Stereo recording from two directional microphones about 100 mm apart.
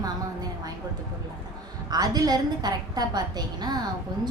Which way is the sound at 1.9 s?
40° right (ahead or behind).